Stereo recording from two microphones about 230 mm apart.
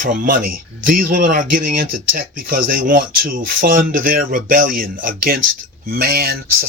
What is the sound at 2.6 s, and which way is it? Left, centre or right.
Speech, right.